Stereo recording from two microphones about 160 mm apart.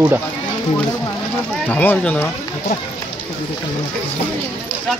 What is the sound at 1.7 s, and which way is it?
Speech, 10° left (ahead or behind).